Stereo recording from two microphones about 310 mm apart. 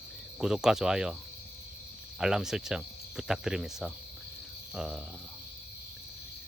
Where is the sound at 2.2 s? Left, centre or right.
Centre.